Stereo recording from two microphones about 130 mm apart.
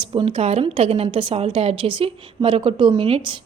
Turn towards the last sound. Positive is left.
turn(degrees=-45)  # may be behind; listen again after turning